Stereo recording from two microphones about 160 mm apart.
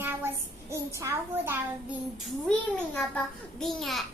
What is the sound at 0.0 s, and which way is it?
Child singing, 15° right (ahead or behind).